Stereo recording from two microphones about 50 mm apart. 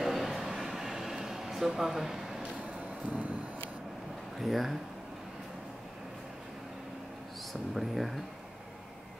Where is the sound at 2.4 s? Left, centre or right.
Right.